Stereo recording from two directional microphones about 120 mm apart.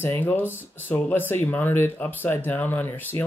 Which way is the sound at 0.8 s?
15° left (ahead or behind).